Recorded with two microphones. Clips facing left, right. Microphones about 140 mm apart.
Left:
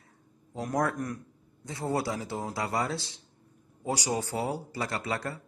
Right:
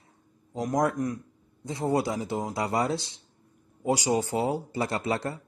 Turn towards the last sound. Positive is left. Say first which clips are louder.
# right 4 dB
turn(degrees=-25)  # may be behind; listen again after turning